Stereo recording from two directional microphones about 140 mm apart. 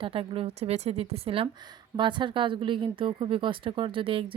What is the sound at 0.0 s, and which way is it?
A woman's voice, 40° right (ahead or behind).